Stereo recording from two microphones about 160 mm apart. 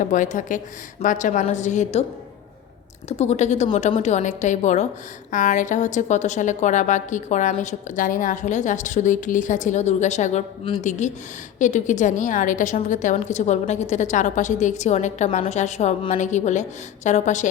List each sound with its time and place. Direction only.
0.0 s a woman's voice: 55° left (ahead or behind)
3.1 s a woman's voice: 40° left (ahead or behind)